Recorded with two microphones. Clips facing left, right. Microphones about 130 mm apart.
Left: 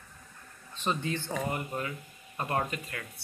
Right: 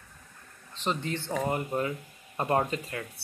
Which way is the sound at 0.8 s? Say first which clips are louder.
Right 1 dB; 25° right (ahead or behind).